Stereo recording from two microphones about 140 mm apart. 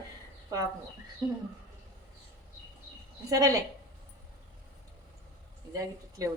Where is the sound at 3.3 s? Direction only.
25° right (ahead or behind).